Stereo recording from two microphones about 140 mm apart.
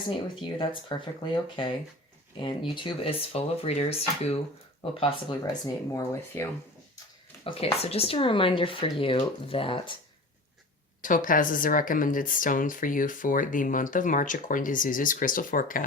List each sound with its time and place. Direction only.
0.4 s speech: 35° left (ahead or behind); by 6.5 s 20° left (ahead or behind)
7.4 s speech: 45° left (ahead or behind)
11.0 s speech: 70° left (ahead or behind)